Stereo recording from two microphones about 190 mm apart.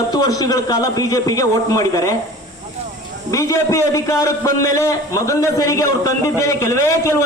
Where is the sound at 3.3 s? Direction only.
15° left (ahead or behind).